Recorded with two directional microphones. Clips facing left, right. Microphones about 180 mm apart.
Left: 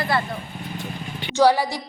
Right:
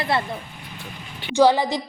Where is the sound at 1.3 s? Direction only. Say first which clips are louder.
Right 1 dB; 15° right (ahead or behind).